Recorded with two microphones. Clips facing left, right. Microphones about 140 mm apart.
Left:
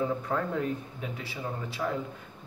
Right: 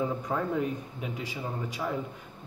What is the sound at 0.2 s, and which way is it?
Speech, 15° right (ahead or behind).